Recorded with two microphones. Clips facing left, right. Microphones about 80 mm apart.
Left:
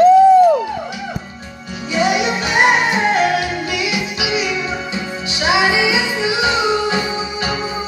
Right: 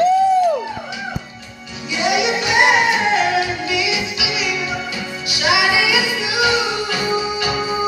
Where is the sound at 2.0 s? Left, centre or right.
Left.